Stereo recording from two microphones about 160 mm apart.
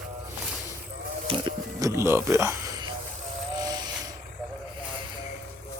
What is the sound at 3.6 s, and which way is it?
Hiss, 25° right (ahead or behind).